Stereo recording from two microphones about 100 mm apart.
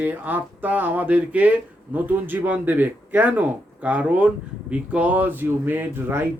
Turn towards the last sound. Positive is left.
turn(degrees=-20)  # may be behind; listen again after turning